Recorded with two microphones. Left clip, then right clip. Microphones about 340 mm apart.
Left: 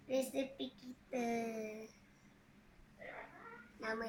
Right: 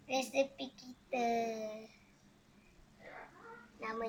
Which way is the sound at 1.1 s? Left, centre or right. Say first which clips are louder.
Right 6 dB; right.